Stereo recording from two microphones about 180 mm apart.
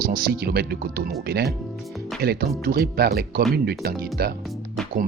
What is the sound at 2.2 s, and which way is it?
Speech, 60° right (ahead or behind).